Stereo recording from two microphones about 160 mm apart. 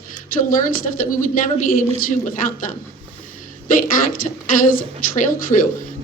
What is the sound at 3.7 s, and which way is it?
A woman's voice, 55° left (ahead or behind).